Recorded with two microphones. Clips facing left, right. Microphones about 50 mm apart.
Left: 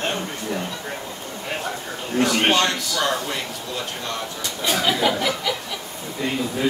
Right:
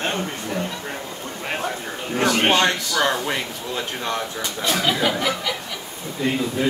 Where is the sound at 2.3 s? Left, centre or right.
Centre.